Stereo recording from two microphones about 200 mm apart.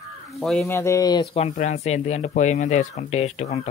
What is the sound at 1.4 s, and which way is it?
Speech, 35° left (ahead or behind).